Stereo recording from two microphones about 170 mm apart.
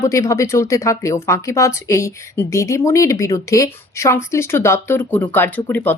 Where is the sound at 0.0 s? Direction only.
15° left (ahead or behind).